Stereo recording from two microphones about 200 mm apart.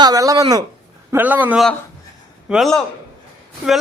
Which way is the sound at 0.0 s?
15° right (ahead or behind).